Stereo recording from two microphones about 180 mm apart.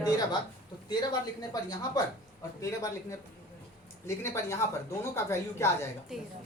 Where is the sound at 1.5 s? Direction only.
20° left (ahead or behind).